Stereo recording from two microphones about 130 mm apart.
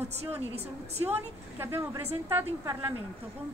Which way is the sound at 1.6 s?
20° right (ahead or behind).